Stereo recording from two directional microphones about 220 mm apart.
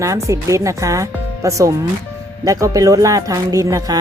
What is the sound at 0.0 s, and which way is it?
Speech, 15° right (ahead or behind).